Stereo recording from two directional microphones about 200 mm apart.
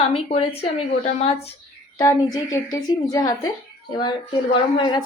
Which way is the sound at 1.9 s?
20° left (ahead or behind).